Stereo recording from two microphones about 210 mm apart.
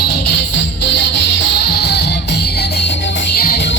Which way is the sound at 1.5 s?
50° left (ahead or behind).